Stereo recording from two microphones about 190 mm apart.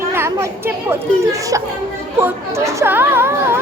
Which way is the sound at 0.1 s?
15° right (ahead or behind).